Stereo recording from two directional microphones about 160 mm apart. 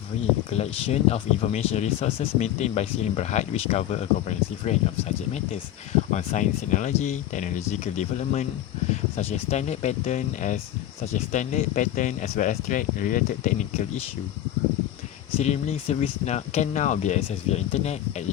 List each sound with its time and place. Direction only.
0.5 s speech: 40° left (ahead or behind)
15.4 s speech: 45° left (ahead or behind)